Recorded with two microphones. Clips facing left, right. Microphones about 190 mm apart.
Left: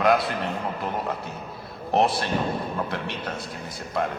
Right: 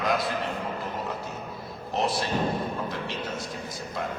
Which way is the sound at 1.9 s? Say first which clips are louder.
Left 5 dB; 60° left (ahead or behind).